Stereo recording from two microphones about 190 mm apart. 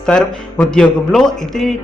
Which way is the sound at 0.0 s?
5° left (ahead or behind).